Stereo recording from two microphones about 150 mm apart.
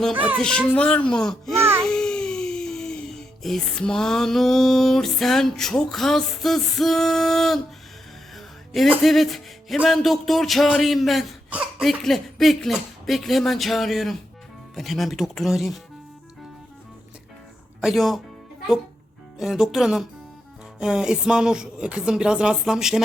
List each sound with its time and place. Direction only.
0.1 s speech: 10° right (ahead or behind)
0.3 s speech: 5° left (ahead or behind)
8.4 s music: centre (ahead or behind)
9.0 s speech: centre (ahead or behind)
17.7 s speech: centre (ahead or behind)
19.4 s speech: centre (ahead or behind)